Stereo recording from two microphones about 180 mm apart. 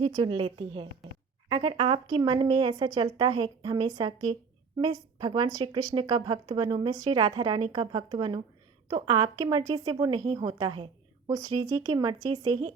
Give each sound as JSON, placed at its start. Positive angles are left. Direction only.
{"t": 0.2, "sound": "speech", "side_deg": -30}